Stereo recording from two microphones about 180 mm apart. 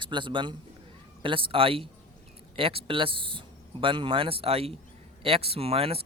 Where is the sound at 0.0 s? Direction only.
25° right (ahead or behind).